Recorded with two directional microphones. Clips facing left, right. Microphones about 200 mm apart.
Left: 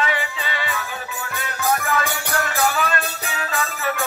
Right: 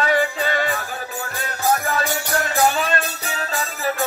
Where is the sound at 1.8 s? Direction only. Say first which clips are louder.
Right 1 dB; 35° right (ahead or behind).